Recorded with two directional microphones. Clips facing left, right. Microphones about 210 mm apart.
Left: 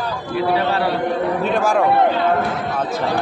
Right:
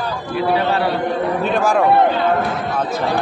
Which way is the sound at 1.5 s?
Centre (ahead or behind).